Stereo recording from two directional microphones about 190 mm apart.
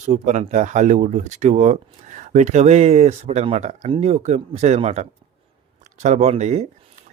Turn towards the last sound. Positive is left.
turn(degrees=-35)  # may be behind; listen again after turning